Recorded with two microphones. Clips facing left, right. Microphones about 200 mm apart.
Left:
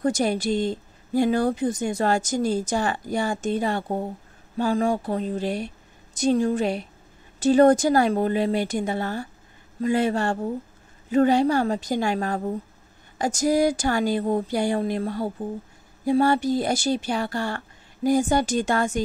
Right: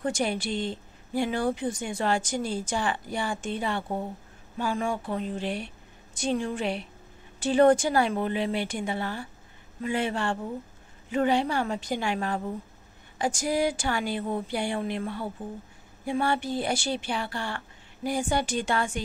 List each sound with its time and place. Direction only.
0.0 s a woman's voice: 40° left (ahead or behind)